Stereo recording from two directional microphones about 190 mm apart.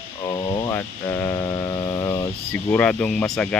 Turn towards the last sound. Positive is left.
turn(degrees=5)  # may be behind; listen again after turning